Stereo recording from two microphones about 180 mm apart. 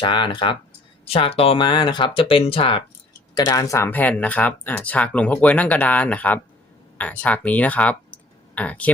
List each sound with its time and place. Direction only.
0.0 s speech: 25° left (ahead or behind); by 8.9 s 10° left (ahead or behind)